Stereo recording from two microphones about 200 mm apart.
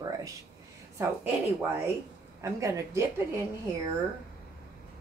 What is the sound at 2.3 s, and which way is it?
Speech, 15° right (ahead or behind).